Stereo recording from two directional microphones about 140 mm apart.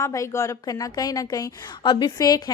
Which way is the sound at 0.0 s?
20° left (ahead or behind).